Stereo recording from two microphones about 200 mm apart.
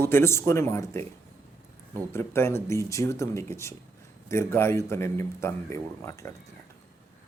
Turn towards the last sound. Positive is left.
turn(degrees=15)  # may be behind; listen again after turning